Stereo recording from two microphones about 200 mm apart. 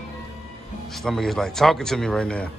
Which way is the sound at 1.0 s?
Centre (ahead or behind).